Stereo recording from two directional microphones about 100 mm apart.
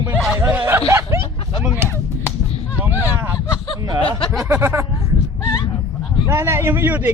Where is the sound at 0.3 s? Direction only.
20° right (ahead or behind).